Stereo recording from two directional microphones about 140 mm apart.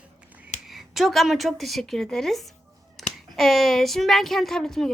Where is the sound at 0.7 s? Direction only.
Centre (ahead or behind).